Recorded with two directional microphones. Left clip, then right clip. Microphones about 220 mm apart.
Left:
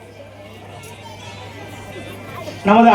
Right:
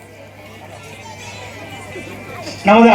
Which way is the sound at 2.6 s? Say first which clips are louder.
Right 3 dB; 25° right (ahead or behind).